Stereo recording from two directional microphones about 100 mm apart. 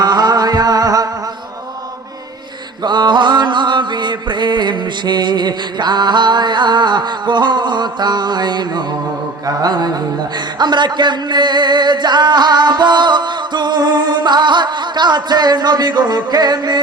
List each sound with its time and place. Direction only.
0.0 s music: 40° right (ahead or behind)
2.8 s a sound: 45° right (ahead or behind)
9.5 s a man's voice: 40° right (ahead or behind)